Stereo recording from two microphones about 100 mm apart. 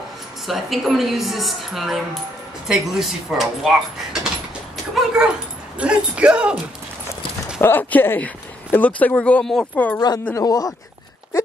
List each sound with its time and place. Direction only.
0.5 s speech: centre (ahead or behind)
4.9 s dog: 5° right (ahead or behind)
5.8 s speech: 10° right (ahead or behind)
7.6 s speech: 20° left (ahead or behind)
9.9 s speech: 40° left (ahead or behind)